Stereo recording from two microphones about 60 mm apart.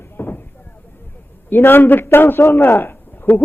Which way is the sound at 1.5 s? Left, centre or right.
Left.